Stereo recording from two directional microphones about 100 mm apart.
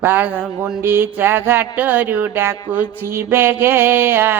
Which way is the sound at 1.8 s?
15° right (ahead or behind).